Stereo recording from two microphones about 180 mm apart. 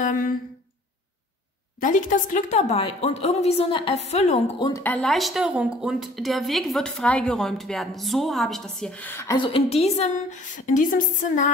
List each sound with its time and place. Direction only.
1.8 s a woman's voice: 45° left (ahead or behind)
4.6 s speech: 25° left (ahead or behind)
4.8 s a woman's voice: 5° left (ahead or behind)
9.4 s a woman's voice: 30° left (ahead or behind)